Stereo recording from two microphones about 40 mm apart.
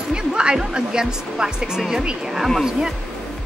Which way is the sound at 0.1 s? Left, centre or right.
Right.